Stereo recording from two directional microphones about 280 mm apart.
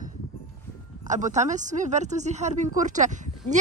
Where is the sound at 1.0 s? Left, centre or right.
Right.